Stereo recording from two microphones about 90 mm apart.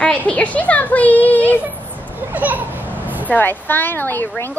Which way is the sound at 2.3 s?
20° right (ahead or behind).